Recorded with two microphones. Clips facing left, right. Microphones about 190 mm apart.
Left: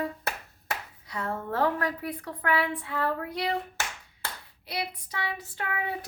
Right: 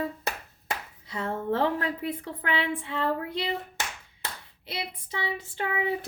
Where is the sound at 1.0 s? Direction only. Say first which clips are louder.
Right 3 dB; 25° right (ahead or behind).